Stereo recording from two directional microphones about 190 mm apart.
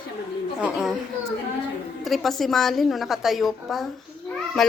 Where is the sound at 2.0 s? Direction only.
Centre (ahead or behind).